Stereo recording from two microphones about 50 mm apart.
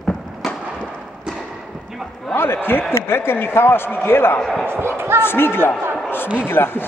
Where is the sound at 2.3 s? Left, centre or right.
Left.